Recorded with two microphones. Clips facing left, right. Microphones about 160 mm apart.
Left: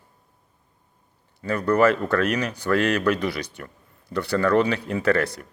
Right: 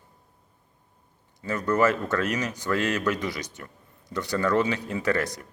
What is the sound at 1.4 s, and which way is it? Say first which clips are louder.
A man's voice: left 4 dB; 20° right (ahead or behind).